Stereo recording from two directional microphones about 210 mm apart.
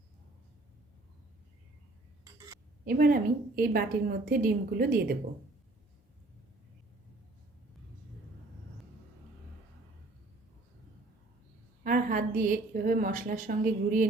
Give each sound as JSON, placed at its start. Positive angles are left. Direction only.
{"t": 2.8, "sound": "a woman's voice", "side_deg": -45}
{"t": 11.8, "sound": "a woman's voice", "side_deg": -40}